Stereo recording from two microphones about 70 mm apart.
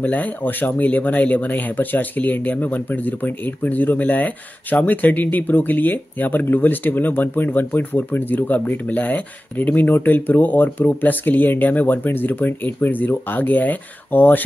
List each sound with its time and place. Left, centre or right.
0.0 s speech: left